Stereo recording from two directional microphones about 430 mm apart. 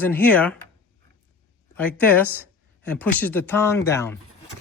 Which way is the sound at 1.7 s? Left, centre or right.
Centre.